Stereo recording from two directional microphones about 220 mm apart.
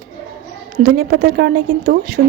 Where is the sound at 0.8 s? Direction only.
45° right (ahead or behind).